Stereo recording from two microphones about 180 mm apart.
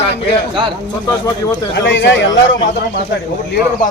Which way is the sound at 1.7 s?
85° left.